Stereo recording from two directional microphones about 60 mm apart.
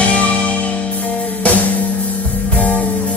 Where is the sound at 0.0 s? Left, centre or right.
Left.